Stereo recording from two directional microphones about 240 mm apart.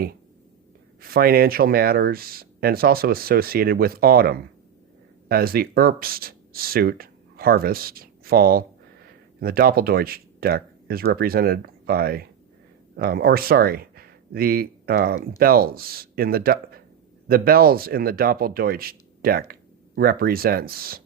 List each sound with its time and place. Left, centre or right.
1.0 s speech: right